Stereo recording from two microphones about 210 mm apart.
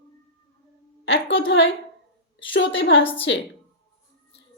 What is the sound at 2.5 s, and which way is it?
Speech, 60° left (ahead or behind).